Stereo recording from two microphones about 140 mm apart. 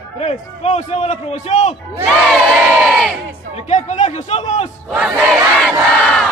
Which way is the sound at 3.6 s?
55° left (ahead or behind).